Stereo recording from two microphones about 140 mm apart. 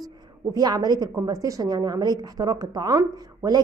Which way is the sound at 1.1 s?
25° right (ahead or behind).